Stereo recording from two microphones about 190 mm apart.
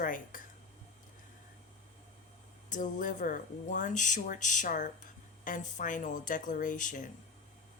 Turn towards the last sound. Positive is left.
turn(degrees=40)  # may be behind; listen again after turning